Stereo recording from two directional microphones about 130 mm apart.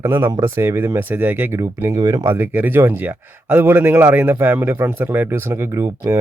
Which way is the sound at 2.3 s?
15° right (ahead or behind).